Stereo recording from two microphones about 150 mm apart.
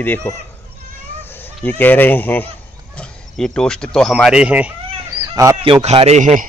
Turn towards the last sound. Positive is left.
turn(degrees=-55)  # may be behind; listen again after turning